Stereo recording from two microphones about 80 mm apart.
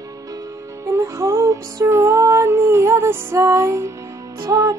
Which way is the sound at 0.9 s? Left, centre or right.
Right.